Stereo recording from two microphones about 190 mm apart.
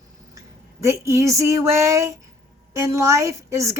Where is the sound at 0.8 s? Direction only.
15° right (ahead or behind).